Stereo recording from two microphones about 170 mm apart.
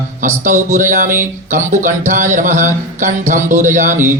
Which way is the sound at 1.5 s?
45° right (ahead or behind).